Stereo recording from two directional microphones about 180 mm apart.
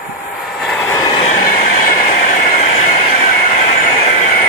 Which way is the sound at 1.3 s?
50° left (ahead or behind).